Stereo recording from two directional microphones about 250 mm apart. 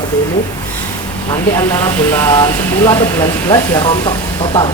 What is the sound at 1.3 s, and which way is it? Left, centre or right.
Speech, centre.